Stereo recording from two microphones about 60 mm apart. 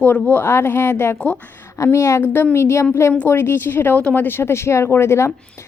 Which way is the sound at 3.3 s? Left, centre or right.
Left.